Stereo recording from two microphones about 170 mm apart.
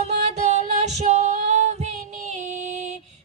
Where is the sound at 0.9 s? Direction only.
40° right (ahead or behind).